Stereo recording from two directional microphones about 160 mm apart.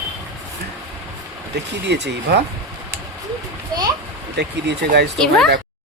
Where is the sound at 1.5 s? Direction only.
90° right.